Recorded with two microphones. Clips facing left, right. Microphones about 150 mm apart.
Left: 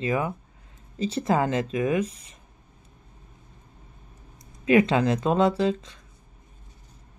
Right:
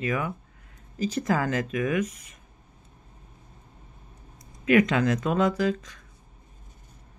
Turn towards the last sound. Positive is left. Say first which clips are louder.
# left 2 dB
turn(degrees=25)  # may be behind; listen again after turning